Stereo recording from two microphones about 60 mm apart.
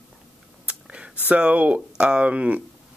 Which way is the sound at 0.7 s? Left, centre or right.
Centre.